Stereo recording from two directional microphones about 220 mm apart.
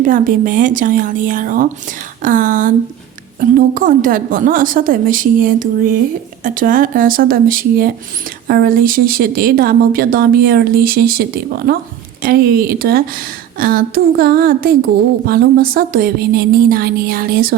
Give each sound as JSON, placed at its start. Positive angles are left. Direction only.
{"t": 0.0, "sound": "speech", "side_deg": -40}
{"t": 3.8, "sound": "speech", "side_deg": -35}